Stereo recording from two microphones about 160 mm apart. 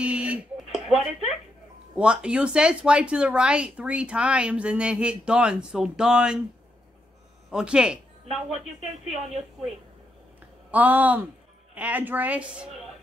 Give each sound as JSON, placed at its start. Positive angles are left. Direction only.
{"t": 0.0, "sound": "a sound", "side_deg": -10}
{"t": 2.0, "sound": "speech", "side_deg": -5}
{"t": 7.5, "sound": "speech", "side_deg": -5}
{"t": 10.7, "sound": "speech", "side_deg": -10}